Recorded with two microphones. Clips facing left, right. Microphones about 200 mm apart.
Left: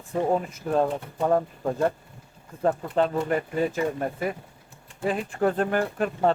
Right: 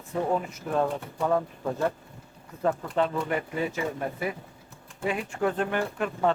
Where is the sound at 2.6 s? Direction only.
35° left (ahead or behind).